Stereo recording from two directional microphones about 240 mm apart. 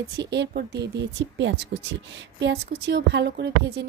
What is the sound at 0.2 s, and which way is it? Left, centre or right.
A woman's voice, right.